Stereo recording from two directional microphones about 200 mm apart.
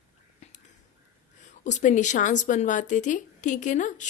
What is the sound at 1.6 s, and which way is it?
A woman's voice, 35° left (ahead or behind).